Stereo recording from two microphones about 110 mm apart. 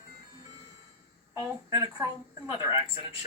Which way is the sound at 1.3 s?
30° right (ahead or behind).